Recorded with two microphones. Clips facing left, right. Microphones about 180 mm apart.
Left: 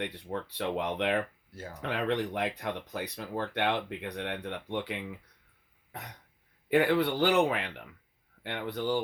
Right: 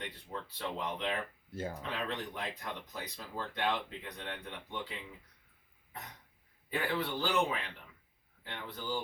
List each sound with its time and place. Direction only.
0.0 s speech: 70° left (ahead or behind)
6.7 s speech: 70° left (ahead or behind)